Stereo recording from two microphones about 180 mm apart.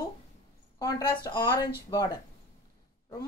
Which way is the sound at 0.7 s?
20° left (ahead or behind).